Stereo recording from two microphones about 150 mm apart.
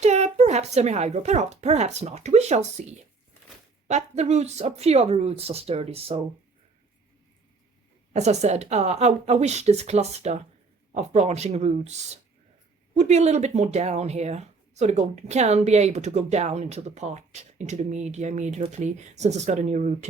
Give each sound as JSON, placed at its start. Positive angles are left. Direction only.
{"t": 0.0, "sound": "a child's voice", "side_deg": -50}
{"t": 3.8, "sound": "speech", "side_deg": -50}
{"t": 8.1, "sound": "speech", "side_deg": -50}